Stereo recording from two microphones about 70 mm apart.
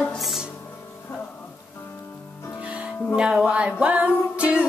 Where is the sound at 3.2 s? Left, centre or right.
Centre.